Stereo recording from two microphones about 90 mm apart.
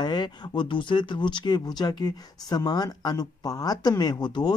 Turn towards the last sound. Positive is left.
turn(degrees=55)  # may be behind; listen again after turning